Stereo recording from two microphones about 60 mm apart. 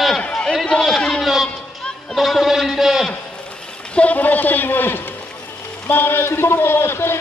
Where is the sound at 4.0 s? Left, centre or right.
Left.